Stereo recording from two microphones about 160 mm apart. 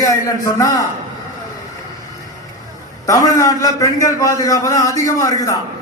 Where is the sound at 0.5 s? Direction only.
20° left (ahead or behind).